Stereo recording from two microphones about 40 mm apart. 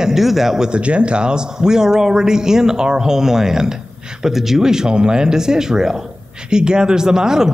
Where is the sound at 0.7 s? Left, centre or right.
Right.